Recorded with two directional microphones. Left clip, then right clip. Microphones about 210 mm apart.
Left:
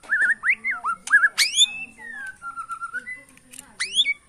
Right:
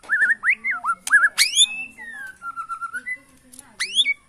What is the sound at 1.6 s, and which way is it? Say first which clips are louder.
Whistling: right 2 dB; 50° right (ahead or behind).